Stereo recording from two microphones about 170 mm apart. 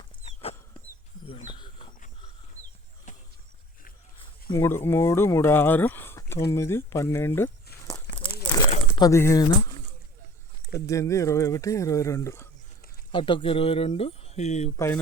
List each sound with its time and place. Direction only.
1.3 s a sound: 30° left (ahead or behind)
4.5 s speech: 15° left (ahead or behind)
8.1 s crumpling: 30° left (ahead or behind)
9.0 s speech: 15° left (ahead or behind)
13.1 s speech: 30° left (ahead or behind)